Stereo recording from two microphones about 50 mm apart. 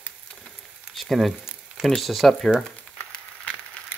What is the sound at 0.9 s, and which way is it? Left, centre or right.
Frying, centre.